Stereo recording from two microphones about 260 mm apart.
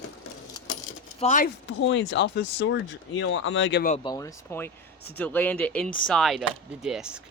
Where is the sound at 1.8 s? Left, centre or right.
Left.